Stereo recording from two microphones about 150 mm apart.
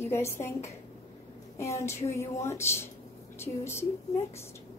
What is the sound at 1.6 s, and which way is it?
A woman's voice, 20° left (ahead or behind).